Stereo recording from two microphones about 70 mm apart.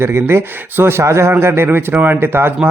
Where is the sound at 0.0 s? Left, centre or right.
Right.